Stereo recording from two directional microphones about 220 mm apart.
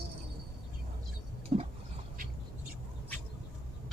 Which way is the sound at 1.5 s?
30° right (ahead or behind).